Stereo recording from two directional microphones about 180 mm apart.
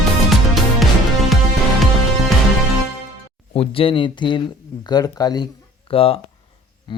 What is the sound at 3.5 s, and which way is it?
Speech, 30° left (ahead or behind).